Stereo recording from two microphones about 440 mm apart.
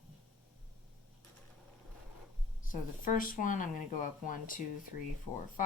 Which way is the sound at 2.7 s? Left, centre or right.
Centre.